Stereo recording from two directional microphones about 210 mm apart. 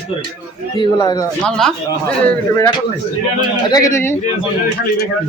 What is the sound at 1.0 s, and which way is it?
Speech, 20° left (ahead or behind).